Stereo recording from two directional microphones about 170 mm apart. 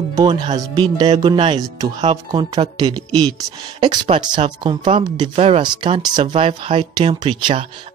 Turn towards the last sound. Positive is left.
turn(degrees=-30)  # may be behind; listen again after turning